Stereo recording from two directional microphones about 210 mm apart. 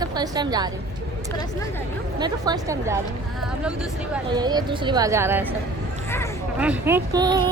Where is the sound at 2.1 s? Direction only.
20° right (ahead or behind).